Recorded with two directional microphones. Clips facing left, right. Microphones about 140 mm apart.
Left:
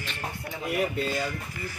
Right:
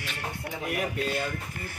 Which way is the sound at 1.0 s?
60° right (ahead or behind).